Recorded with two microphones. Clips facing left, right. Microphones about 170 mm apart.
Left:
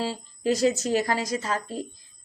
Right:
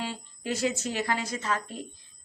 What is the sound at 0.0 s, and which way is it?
A woman's voice, 35° left (ahead or behind).